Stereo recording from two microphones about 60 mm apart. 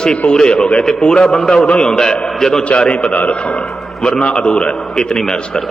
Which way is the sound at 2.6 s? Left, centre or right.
Centre.